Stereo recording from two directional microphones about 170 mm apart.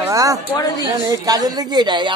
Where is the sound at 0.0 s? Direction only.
20° right (ahead or behind).